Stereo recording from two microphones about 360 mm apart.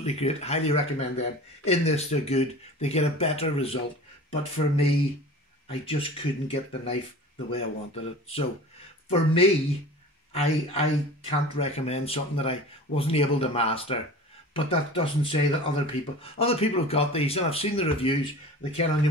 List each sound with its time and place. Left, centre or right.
0.0 s speech: centre